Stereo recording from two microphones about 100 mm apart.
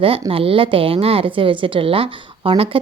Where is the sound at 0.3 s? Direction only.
65° right (ahead or behind).